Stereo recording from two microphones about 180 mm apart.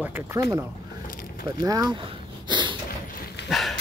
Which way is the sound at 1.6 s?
20° right (ahead or behind).